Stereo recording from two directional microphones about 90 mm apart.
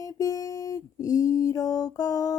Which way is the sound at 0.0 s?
40° left (ahead or behind).